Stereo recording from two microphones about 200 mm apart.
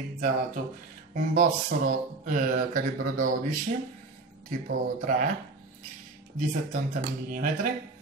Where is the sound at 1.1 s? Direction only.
45° right (ahead or behind).